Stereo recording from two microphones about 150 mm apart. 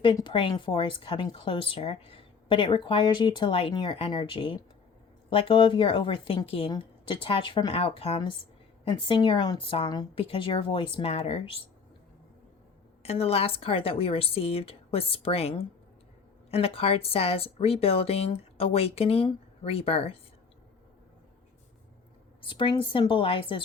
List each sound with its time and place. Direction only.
0.0 s speech: 30° left (ahead or behind)
13.0 s speech: 45° left (ahead or behind)
22.4 s speech: 35° left (ahead or behind)